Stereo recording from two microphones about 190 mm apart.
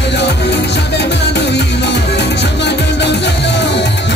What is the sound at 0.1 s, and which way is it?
Music, 65° left (ahead or behind).